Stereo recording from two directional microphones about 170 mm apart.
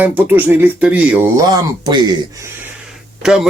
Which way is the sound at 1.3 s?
20° right (ahead or behind).